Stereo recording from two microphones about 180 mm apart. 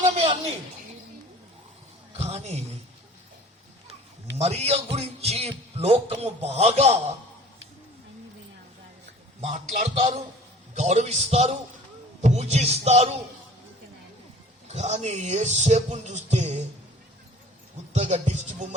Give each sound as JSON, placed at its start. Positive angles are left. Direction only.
{"t": 0.0, "sound": "a sound", "side_deg": -35}
{"t": 2.1, "sound": "a sound", "side_deg": -40}
{"t": 4.4, "sound": "speech", "side_deg": -35}
{"t": 9.7, "sound": "speech", "side_deg": -50}
{"t": 10.8, "sound": "speech", "side_deg": -40}
{"t": 14.7, "sound": "speech", "side_deg": -40}
{"t": 17.9, "sound": "speech", "side_deg": -40}